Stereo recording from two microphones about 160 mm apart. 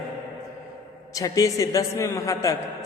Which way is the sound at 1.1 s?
20° left (ahead or behind).